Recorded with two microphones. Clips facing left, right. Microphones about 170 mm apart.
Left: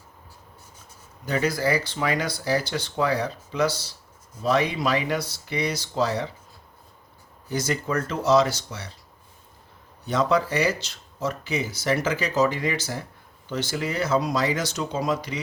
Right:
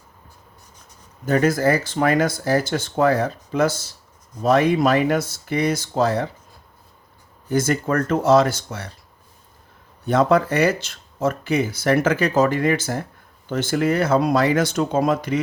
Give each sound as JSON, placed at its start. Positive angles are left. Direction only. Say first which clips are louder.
{"t": 1.2, "sound": "speech", "louder": "right 6 dB", "side_deg": -50}
{"t": 7.4, "sound": "speech", "louder": "right 6 dB", "side_deg": -50}
{"t": 10.1, "sound": "speech", "louder": "right 5 dB", "side_deg": -55}